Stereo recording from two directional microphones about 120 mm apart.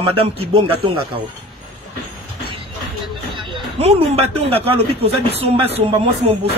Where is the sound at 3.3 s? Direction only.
40° right (ahead or behind).